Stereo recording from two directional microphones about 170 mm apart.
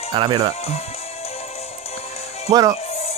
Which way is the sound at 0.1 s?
30° right (ahead or behind).